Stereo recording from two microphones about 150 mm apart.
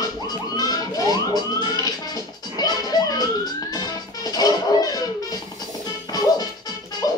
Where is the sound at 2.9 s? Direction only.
25° left (ahead or behind).